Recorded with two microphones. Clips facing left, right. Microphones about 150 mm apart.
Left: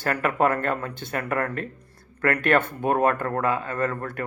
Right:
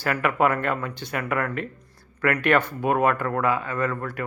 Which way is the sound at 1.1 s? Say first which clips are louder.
Even; 35° left (ahead or behind).